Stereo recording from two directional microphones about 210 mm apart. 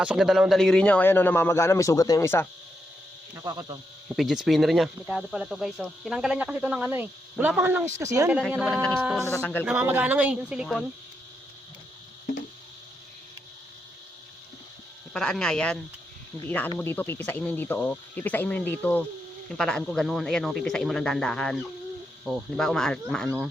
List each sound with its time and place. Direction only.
0.0 s speech: 5° right (ahead or behind)
3.3 s speech: 15° right (ahead or behind)
4.1 s speech: centre (ahead or behind)
9.6 s speech: 10° right (ahead or behind)
15.1 s speech: 5° left (ahead or behind)